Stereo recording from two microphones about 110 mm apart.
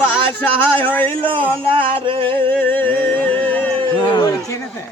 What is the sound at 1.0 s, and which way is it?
Music, 50° right (ahead or behind).